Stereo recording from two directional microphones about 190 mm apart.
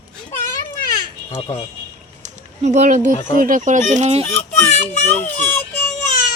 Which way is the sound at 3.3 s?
45° right (ahead or behind).